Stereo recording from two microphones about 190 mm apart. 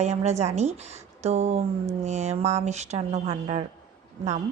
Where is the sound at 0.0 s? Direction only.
35° right (ahead or behind).